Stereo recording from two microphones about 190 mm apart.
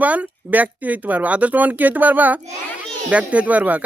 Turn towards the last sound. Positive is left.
turn(degrees=-10)  # may be behind; listen again after turning